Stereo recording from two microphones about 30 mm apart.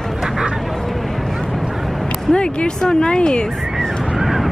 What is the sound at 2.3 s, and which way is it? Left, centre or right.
Speech, left.